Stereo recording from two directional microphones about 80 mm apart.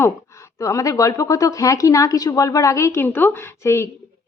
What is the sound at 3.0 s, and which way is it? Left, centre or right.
Speech, left.